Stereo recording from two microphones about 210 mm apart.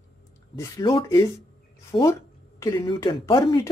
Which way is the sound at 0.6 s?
20° left (ahead or behind).